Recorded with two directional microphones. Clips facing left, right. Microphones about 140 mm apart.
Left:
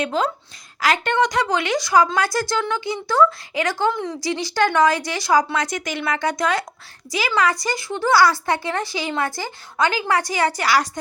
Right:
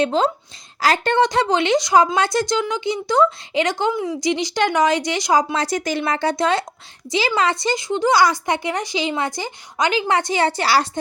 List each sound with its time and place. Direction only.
0.0 s speech: 30° right (ahead or behind)
3.9 s a woman's voice: 10° right (ahead or behind)
4.2 s speech: 20° right (ahead or behind)
5.6 s speech: 35° right (ahead or behind)